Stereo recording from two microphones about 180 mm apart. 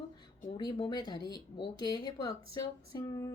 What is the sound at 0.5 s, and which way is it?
A woman's voice, 25° left (ahead or behind).